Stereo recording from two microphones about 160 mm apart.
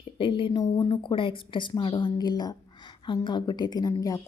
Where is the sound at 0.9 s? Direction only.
30° left (ahead or behind).